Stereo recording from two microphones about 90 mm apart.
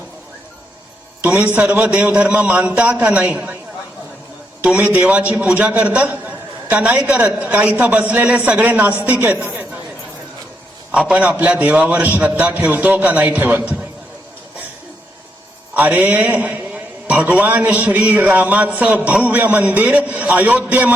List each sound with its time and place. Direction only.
1.2 s a man's voice: 15° right (ahead or behind)
4.6 s a man's voice: 15° right (ahead or behind)
10.9 s a man's voice: 15° right (ahead or behind)
15.7 s a man's voice: 20° right (ahead or behind)